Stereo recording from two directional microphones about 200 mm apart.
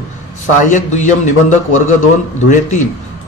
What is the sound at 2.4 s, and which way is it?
Speech, 40° left (ahead or behind).